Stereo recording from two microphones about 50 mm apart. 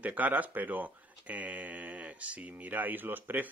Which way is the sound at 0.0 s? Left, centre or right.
Right.